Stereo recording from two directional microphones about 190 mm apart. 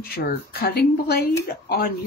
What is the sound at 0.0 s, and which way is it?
Speech, 50° left (ahead or behind).